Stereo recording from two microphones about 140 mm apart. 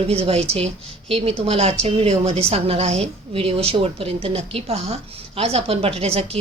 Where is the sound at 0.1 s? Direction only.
45° right (ahead or behind).